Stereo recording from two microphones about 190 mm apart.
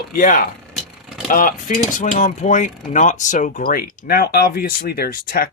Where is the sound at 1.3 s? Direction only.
45° left (ahead or behind).